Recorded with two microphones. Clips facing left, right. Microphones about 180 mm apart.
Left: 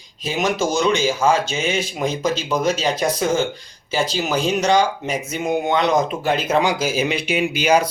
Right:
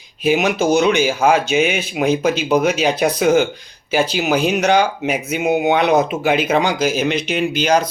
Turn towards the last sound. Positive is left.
turn(degrees=10)  # may be behind; listen again after turning